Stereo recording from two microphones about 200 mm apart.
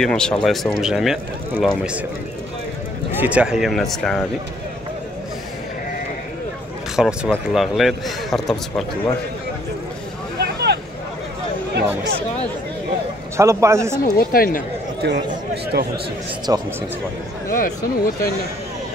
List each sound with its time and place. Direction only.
0.0 s a man's voice: 5° left (ahead or behind)
3.2 s a man's voice: 5° right (ahead or behind)
7.0 s a man's voice: centre (ahead or behind)
10.4 s a sound: 55° right (ahead or behind)
11.8 s speech: 10° right (ahead or behind)
13.4 s speech: 15° right (ahead or behind)
14.0 s speech: 45° left (ahead or behind)
15.0 s speech: 55° right (ahead or behind)
16.5 s speech: 15° right (ahead or behind)
17.5 s speech: 45° left (ahead or behind)